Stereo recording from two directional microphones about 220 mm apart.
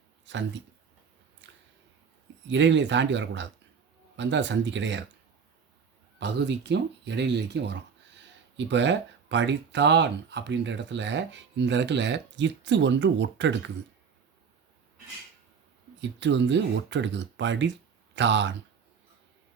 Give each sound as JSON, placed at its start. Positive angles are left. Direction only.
{"t": 2.5, "sound": "speech", "side_deg": -55}
{"t": 6.1, "sound": "speech", "side_deg": -50}
{"t": 16.0, "sound": "speech", "side_deg": -55}